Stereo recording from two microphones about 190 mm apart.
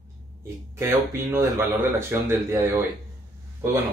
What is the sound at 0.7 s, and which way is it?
Speech, 15° right (ahead or behind).